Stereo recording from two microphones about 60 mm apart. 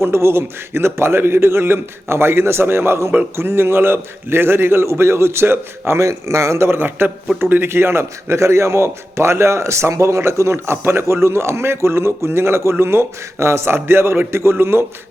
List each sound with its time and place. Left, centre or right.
0.0 s a man's voice: right
6.0 s a man's voice: right